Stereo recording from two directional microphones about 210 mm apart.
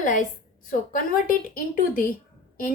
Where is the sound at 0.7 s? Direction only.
40° left (ahead or behind).